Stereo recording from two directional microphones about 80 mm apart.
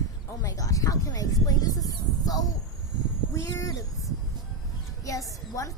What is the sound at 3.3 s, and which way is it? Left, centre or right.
Speech, left.